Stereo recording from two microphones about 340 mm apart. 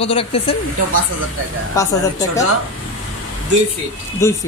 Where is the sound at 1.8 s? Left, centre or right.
Centre.